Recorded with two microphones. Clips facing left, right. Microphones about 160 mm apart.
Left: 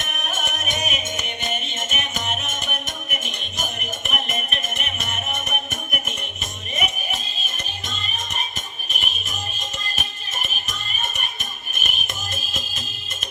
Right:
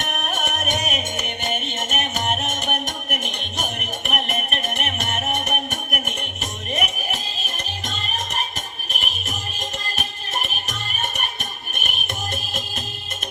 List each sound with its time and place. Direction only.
0.0 s music: 60° right (ahead or behind)